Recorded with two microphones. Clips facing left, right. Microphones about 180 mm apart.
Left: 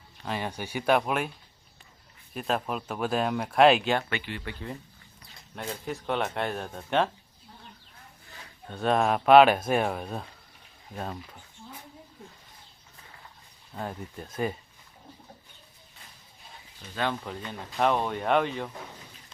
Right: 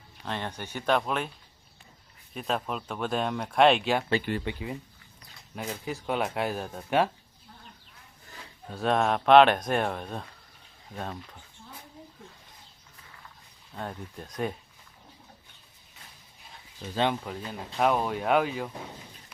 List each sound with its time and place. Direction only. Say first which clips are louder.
0.3 s speech: left 2 dB; 10° left (ahead or behind)
2.3 s speech: left 1 dB; centre (ahead or behind)
4.2 s speech: right 7 dB; 45° right (ahead or behind)
5.5 s speech: even; 5° right (ahead or behind)
8.6 s speech: left 1 dB; centre (ahead or behind)
13.7 s speech: left 1 dB; 5° left (ahead or behind)
17.2 s speech: right 1 dB; 5° right (ahead or behind)